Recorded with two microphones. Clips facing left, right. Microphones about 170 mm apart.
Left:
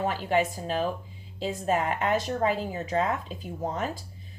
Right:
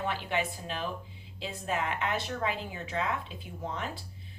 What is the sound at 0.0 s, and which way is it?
A woman's voice, 40° left (ahead or behind).